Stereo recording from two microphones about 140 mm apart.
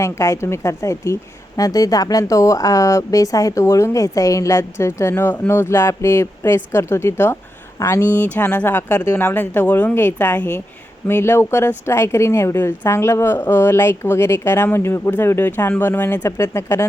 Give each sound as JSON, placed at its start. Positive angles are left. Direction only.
{"t": 0.0, "sound": "a woman's voice", "side_deg": 20}